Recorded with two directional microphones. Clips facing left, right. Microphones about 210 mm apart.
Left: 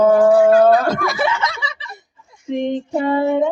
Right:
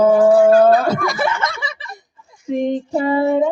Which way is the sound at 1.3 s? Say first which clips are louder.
Even; 50° right (ahead or behind).